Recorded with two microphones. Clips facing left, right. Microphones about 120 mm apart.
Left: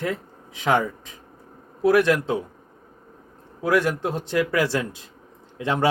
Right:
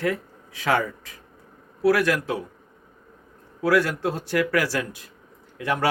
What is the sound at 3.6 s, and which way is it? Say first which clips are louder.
Speech: even; 20° left (ahead or behind).